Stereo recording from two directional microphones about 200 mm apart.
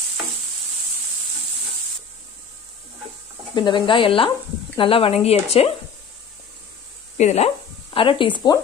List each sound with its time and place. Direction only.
3.5 s speech: 25° left (ahead or behind)
7.2 s speech: 35° left (ahead or behind)